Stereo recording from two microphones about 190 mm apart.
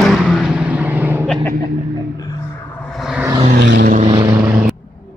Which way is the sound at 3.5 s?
60° right (ahead or behind).